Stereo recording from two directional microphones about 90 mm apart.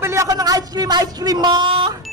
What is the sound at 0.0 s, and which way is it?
Speech, 35° right (ahead or behind).